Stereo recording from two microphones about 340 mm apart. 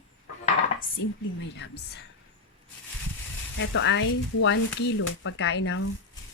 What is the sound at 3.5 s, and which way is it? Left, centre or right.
Speech, left.